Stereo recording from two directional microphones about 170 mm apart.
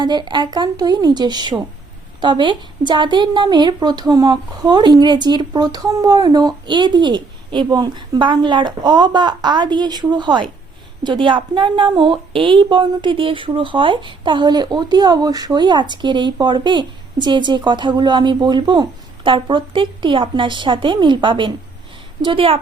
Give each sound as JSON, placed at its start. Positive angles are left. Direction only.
{"t": 0.0, "sound": "speech", "side_deg": -25}